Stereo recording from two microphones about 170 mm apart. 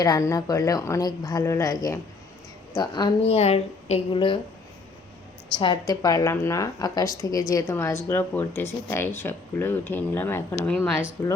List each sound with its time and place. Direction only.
0.0 s a woman's voice: 20° left (ahead or behind)
3.3 s speech: 40° left (ahead or behind)
5.5 s a woman's voice: 25° left (ahead or behind)